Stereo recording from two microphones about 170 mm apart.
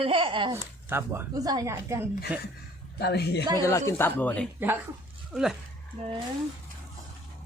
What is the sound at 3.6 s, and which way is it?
Speech, 15° left (ahead or behind).